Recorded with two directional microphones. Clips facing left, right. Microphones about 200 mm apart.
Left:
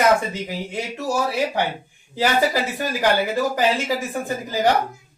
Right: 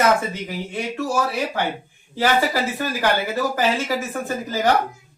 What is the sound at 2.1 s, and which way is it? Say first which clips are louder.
Speech: even; 15° left (ahead or behind).